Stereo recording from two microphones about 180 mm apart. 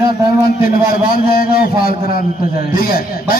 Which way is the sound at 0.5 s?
55° left (ahead or behind).